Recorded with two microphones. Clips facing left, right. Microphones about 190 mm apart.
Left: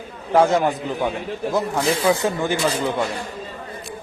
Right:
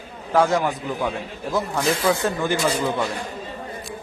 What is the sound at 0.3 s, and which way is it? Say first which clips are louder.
Speech: left 3 dB; 20° left (ahead or behind).